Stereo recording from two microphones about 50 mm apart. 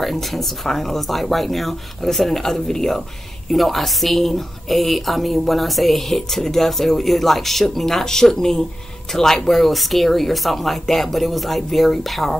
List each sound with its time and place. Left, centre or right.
0.0 s a woman's voice: centre